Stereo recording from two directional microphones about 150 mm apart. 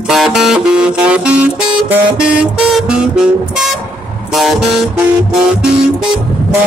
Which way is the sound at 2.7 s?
5° right (ahead or behind).